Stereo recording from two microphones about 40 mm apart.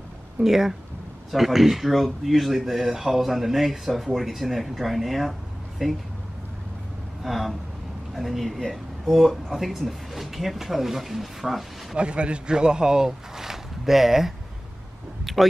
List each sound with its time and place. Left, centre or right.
0.4 s speech: centre
7.2 s speech: centre
11.9 s speech: right; by 14.3 s centre
15.3 s a sound: centre